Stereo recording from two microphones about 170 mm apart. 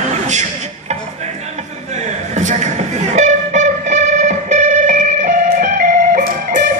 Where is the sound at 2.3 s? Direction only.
45° right (ahead or behind).